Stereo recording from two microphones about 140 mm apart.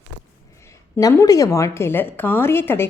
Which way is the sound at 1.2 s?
25° left (ahead or behind).